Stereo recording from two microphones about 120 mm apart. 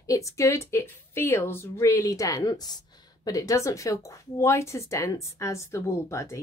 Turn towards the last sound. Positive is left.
turn(degrees=25)  # may be behind; listen again after turning